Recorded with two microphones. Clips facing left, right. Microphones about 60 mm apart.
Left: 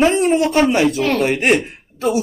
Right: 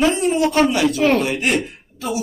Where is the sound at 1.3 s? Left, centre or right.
Left.